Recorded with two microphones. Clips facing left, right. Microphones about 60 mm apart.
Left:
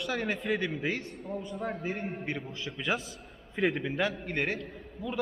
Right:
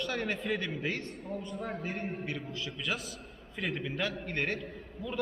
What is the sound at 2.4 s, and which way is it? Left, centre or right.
A man's voice, left.